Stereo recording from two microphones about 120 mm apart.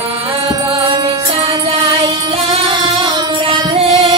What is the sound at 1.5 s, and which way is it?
Music, 55° right (ahead or behind).